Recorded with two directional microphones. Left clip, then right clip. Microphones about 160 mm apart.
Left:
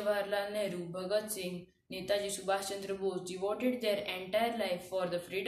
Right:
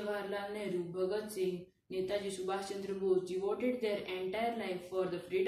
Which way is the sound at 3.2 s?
25° left (ahead or behind).